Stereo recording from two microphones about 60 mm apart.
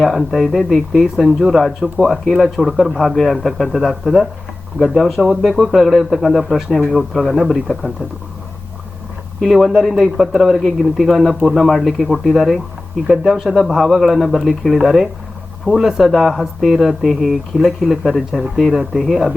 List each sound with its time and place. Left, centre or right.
0.0 s speech: centre
9.4 s speech: centre
13.6 s speech: centre